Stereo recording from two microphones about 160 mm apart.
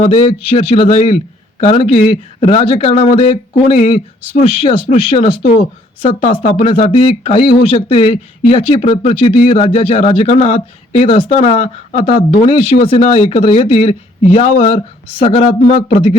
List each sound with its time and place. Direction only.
0.5 s speech: 35° left (ahead or behind)